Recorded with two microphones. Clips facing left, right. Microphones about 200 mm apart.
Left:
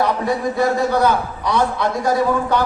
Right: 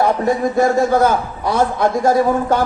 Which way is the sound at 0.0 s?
45° right (ahead or behind).